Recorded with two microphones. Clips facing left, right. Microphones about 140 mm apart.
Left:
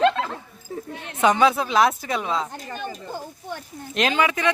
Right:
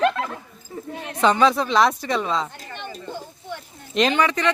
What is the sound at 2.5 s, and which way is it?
Speech, 40° left (ahead or behind).